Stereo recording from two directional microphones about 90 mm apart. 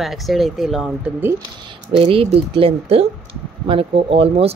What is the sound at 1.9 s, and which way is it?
Speech, 90° right.